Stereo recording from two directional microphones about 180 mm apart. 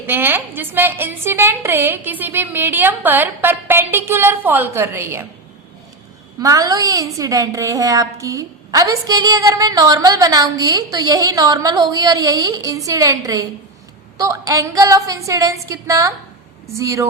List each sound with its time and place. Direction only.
0.1 s a woman's voice: 10° right (ahead or behind)
6.4 s a woman's voice: 20° right (ahead or behind)